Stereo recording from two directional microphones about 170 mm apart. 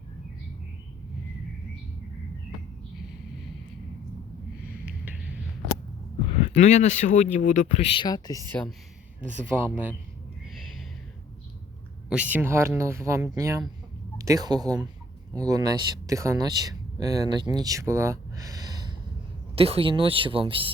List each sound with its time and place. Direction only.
4.6 s a sound: 10° right (ahead or behind)
6.5 s speech: 45° left (ahead or behind)
8.0 s speech: 20° left (ahead or behind)
9.5 s speech: 10° right (ahead or behind)
12.0 s speech: 10° right (ahead or behind); by 18.9 s 25° right (ahead or behind)
19.5 s speech: 35° right (ahead or behind)